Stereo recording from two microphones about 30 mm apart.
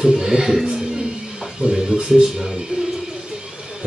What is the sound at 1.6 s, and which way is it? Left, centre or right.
Speech, right.